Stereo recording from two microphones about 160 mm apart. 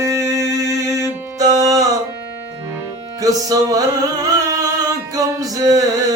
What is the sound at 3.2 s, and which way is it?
Music, 20° right (ahead or behind).